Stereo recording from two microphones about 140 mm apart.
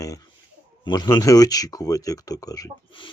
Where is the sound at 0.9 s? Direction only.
30° left (ahead or behind).